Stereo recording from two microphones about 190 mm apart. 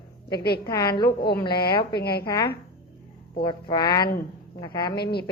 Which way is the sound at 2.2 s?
20° left (ahead or behind).